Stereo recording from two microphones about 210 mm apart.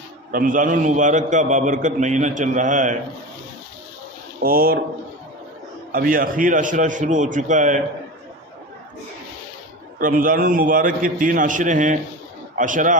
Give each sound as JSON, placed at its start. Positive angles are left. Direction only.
{"t": 0.3, "sound": "a man's voice", "side_deg": -40}
{"t": 4.4, "sound": "speech", "side_deg": -45}
{"t": 5.9, "sound": "a man's voice", "side_deg": -40}
{"t": 9.9, "sound": "a man's voice", "side_deg": -40}